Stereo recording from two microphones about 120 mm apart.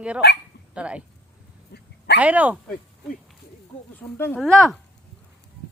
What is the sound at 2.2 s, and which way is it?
Speech, 10° right (ahead or behind).